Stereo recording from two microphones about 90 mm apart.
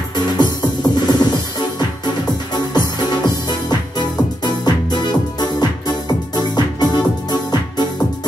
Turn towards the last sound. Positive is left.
turn(degrees=50)  # may be behind; listen again after turning